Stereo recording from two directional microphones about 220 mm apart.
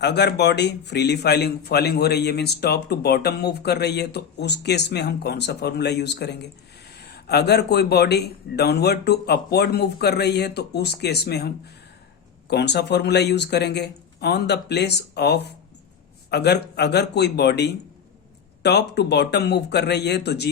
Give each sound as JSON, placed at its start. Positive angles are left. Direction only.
{"t": 0.0, "sound": "a man's voice", "side_deg": 50}